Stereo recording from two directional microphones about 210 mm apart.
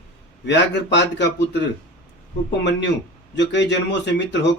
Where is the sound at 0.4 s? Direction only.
55° left (ahead or behind).